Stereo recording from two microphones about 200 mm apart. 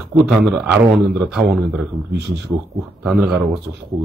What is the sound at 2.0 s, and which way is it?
Speech, 55° right (ahead or behind).